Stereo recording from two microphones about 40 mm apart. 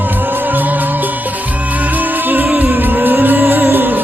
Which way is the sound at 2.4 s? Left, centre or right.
Right.